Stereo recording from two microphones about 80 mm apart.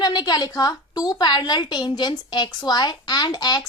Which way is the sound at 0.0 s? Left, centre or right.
Left.